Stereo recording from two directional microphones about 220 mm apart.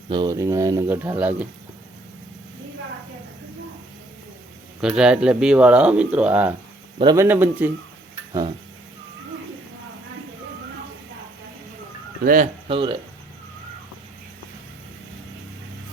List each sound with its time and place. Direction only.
0.1 s speech: 20° right (ahead or behind)
4.8 s speech: 5° right (ahead or behind)
8.3 s a sound: 20° right (ahead or behind)
12.2 s speech: 40° right (ahead or behind)
12.6 s speech: 20° right (ahead or behind)